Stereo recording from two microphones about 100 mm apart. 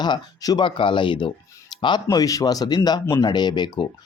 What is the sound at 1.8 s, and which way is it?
Speech, 45° left (ahead or behind).